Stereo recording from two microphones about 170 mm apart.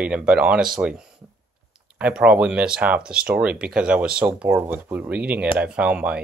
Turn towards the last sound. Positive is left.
turn(degrees=-5)  # may be behind; listen again after turning